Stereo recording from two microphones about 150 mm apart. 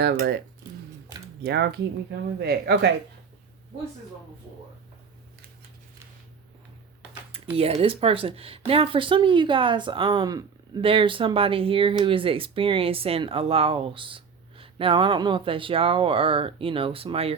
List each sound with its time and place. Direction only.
0.0 s speech: 90° right
2.4 s speech: 90° right
7.5 s speech: 40° right (ahead or behind)